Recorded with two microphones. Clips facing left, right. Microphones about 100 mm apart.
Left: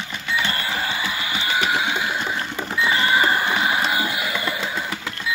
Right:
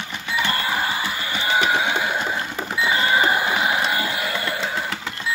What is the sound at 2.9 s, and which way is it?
Cash register, 20° right (ahead or behind).